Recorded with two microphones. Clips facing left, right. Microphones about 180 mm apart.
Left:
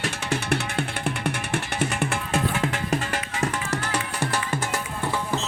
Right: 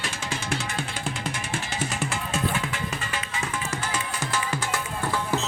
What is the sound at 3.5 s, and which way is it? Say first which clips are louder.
Music: left 3 dB; 70° left (ahead or behind).